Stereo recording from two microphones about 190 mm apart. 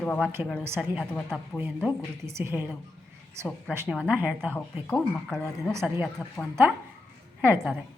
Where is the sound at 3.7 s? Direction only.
5° right (ahead or behind).